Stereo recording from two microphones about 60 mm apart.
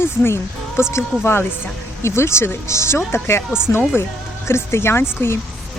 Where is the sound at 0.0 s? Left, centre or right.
Left.